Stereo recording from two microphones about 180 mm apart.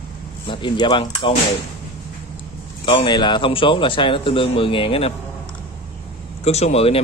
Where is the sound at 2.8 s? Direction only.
30° left (ahead or behind).